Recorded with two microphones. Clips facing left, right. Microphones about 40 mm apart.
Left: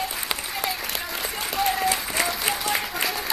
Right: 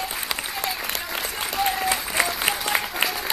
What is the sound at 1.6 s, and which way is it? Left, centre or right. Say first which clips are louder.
Applause: even; centre.